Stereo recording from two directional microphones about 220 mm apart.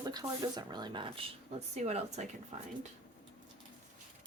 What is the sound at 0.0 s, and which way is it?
Speech, 15° right (ahead or behind).